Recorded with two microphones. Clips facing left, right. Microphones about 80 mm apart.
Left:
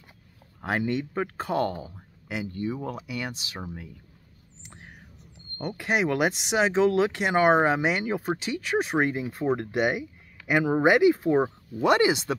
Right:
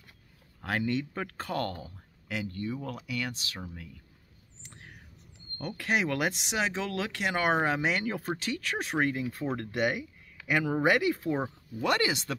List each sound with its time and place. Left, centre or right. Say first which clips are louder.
0.7 s speech: left 3 dB; centre
4.6 s bird: left 3 dB; left
5.6 s speech: left 4 dB; centre